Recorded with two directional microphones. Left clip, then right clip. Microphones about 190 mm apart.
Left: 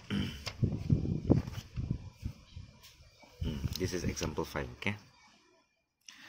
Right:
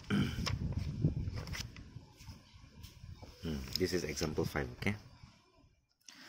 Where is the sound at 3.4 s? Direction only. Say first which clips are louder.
Right 2 dB; 25° right (ahead or behind).